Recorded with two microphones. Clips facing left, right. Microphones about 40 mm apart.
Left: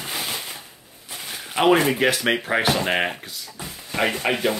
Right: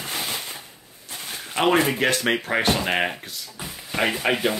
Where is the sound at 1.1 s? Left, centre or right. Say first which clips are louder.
Even; centre.